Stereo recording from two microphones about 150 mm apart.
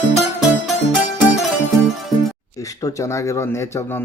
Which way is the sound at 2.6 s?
20° left (ahead or behind).